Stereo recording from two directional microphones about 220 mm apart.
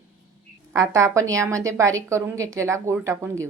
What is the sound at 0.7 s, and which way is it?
Speech, 10° right (ahead or behind).